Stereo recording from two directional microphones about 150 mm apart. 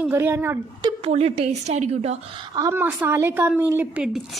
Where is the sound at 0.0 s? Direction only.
15° right (ahead or behind).